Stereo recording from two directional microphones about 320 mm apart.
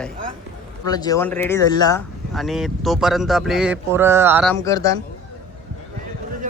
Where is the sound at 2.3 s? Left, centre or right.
Centre.